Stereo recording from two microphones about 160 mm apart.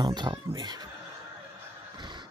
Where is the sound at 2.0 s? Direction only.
30° right (ahead or behind).